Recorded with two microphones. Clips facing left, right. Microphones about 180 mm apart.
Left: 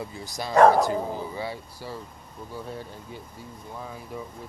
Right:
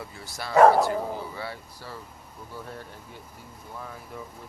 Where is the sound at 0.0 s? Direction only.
15° left (ahead or behind).